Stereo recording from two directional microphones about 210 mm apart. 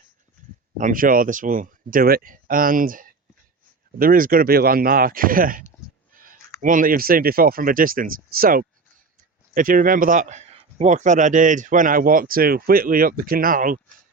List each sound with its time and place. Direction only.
0.8 s speech: 40° right (ahead or behind)
6.1 s a sound: 40° right (ahead or behind)
6.6 s speech: 40° right (ahead or behind)